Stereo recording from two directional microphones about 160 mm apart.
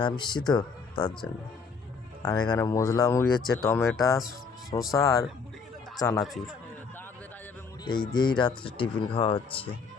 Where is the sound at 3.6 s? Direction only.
15° left (ahead or behind).